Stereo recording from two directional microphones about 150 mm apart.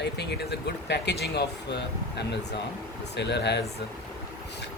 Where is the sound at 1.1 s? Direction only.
90° left.